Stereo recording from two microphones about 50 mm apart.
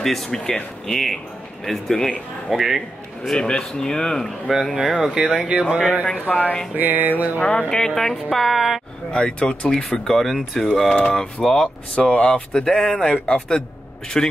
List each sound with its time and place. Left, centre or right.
0.0 s speech: centre
4.5 s speech: centre
5.5 s speech: right
6.1 s speech: left
6.7 s music: right
7.3 s speech: left
7.7 s speech: centre
9.1 s speech: left
9.8 s speech: centre
10.9 s speech: centre
11.9 s speech: left